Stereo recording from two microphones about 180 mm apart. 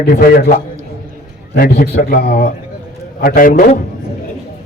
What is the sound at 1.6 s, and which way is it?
A man's voice, 55° left (ahead or behind).